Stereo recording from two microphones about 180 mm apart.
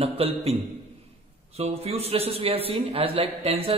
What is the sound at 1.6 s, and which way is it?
A man's voice, 35° right (ahead or behind).